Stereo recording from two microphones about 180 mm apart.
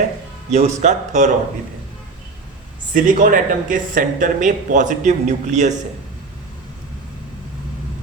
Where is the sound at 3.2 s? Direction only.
50° right (ahead or behind).